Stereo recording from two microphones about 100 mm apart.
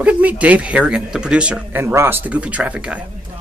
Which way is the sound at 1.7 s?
25° right (ahead or behind).